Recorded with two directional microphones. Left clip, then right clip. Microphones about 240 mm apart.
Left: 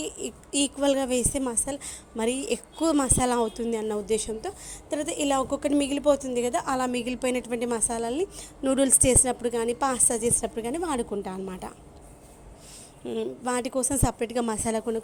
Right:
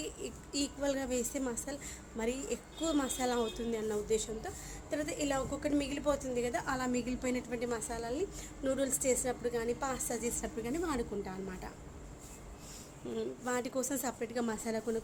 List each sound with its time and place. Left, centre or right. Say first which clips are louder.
0.0 s a woman's voice: left 8 dB; left
13.1 s a woman's voice: left 8 dB; left